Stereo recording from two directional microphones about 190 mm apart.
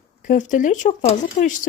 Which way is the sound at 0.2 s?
40° left (ahead or behind).